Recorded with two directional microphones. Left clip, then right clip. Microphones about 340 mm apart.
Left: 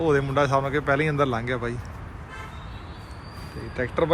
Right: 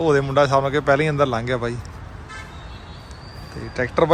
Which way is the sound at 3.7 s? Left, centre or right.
Centre.